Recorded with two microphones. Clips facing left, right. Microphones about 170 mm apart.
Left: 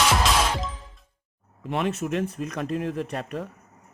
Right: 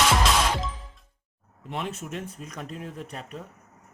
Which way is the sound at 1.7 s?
75° left (ahead or behind).